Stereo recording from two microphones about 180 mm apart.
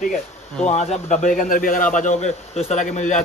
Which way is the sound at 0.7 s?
40° left (ahead or behind).